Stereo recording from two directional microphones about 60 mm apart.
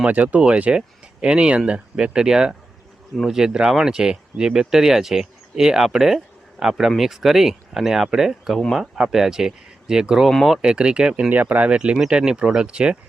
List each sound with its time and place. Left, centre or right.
0.0 s speech: right
10.2 s speech: centre
10.6 s speech: centre
11.3 s speech: right